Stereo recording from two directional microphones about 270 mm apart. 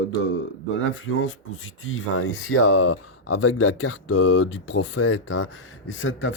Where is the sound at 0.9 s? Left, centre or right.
Left.